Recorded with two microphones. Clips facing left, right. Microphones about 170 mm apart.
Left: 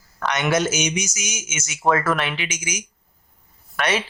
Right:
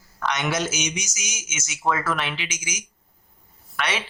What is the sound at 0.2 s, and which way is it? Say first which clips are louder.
A man's voice: left 4 dB; 55° left (ahead or behind).